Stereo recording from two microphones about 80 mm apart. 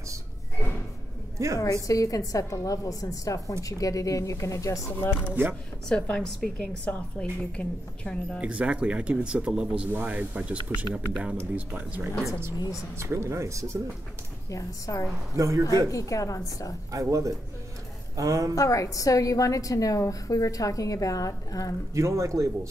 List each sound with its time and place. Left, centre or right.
1.6 s a woman's voice: left
5.2 s speech: right
5.9 s a woman's voice: centre
8.4 s speech: centre
12.9 s speech: right
14.5 s a woman's voice: left
15.3 s speech: right
15.9 s a woman's voice: left
16.9 s a woman's voice: right
18.5 s a woman's voice: left
21.9 s speech: right